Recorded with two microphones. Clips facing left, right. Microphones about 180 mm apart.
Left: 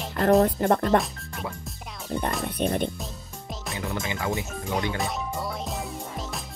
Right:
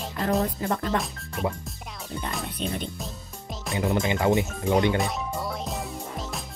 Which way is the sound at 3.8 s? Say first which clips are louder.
Right 7 dB; 30° right (ahead or behind).